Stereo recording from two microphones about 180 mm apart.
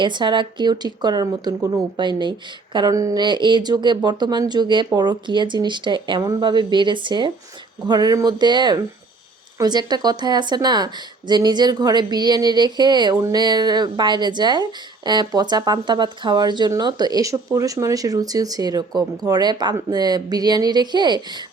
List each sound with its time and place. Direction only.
0.0 s a woman's voice: 25° right (ahead or behind)